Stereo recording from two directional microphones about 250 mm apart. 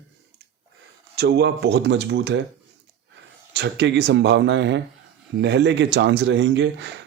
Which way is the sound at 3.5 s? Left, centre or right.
Right.